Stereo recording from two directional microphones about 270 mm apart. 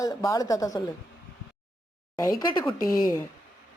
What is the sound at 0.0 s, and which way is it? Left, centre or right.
Speech, centre.